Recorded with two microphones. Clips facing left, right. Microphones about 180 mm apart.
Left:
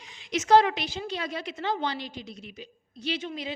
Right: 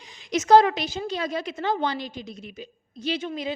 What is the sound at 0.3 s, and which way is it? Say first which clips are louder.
A woman's voice: right 4 dB; 40° right (ahead or behind).